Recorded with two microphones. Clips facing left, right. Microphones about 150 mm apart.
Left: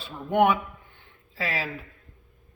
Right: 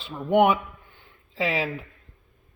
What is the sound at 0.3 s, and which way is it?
A man's voice, 15° right (ahead or behind).